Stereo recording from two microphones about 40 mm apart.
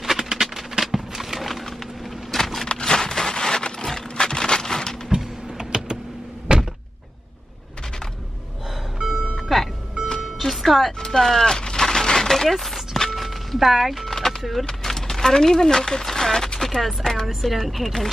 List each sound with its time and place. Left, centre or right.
0.0 s a sound: centre
5.2 s typing: centre
6.5 s door: right
9.4 s music: centre
11.0 s a sound: centre
13.1 s music: centre
14.4 s speech: centre
14.7 s speech: centre
16.5 s chopping: centre
17.4 s speech: centre